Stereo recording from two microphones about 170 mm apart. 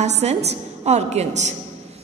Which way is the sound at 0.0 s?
40° right (ahead or behind).